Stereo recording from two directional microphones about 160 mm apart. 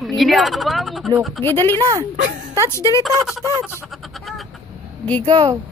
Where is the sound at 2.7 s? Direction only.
20° left (ahead or behind).